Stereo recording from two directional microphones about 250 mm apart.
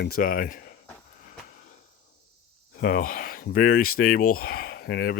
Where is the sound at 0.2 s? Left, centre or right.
Left.